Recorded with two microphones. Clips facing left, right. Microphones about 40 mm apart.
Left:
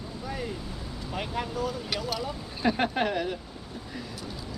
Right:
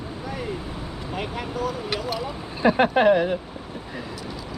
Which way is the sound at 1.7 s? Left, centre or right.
Right.